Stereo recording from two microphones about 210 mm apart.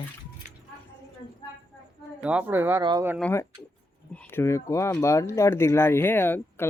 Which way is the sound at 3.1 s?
5° left (ahead or behind).